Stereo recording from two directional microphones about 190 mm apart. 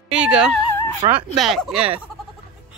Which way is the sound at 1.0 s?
30° right (ahead or behind).